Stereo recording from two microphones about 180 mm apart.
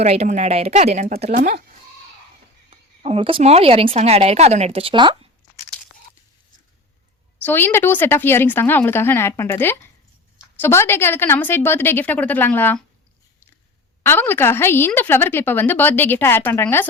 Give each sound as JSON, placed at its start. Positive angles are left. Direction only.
{"t": 0.0, "sound": "speech", "side_deg": -35}
{"t": 1.3, "sound": "speech", "side_deg": -55}
{"t": 2.6, "sound": "speech", "side_deg": -35}
{"t": 7.4, "sound": "a woman's voice", "side_deg": 10}
{"t": 14.0, "sound": "a woman's voice", "side_deg": 10}